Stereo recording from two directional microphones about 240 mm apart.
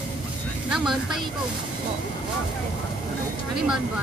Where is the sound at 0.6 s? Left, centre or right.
Centre.